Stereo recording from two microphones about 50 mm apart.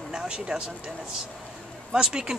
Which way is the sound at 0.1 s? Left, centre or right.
Centre.